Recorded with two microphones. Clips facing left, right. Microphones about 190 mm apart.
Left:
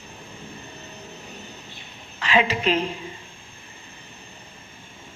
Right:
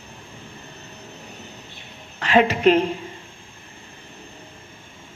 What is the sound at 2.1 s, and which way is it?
Speech, 55° right (ahead or behind).